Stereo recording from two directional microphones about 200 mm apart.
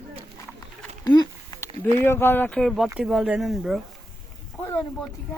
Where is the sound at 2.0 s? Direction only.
10° left (ahead or behind).